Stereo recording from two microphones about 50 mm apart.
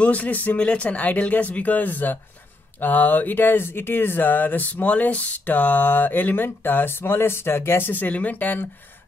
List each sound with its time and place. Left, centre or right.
0.0 s speech: left
7.9 s speech: left